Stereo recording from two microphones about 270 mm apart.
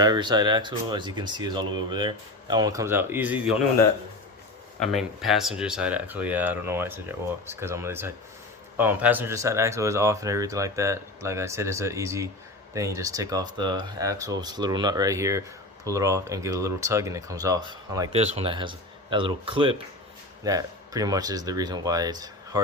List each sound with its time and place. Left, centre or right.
0.0 s speech: centre
4.8 s speech: centre